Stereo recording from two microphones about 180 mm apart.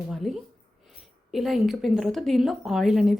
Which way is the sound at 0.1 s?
Centre (ahead or behind).